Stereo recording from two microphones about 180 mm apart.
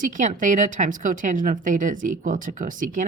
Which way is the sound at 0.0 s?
45° right (ahead or behind).